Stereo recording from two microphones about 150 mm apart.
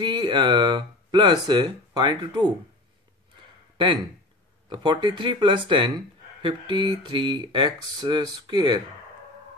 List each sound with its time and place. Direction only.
0.0 s speech: 30° right (ahead or behind)
3.7 s speech: 35° right (ahead or behind)